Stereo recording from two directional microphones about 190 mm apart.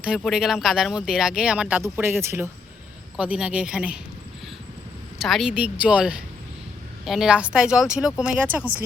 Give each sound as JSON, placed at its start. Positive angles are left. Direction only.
{"t": 0.2, "sound": "speech", "side_deg": 0}
{"t": 5.2, "sound": "speech", "side_deg": 0}